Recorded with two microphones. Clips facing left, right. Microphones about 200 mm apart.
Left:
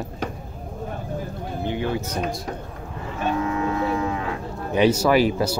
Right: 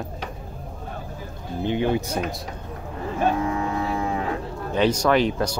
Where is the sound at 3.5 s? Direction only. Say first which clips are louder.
Left 2 dB; 30° right (ahead or behind).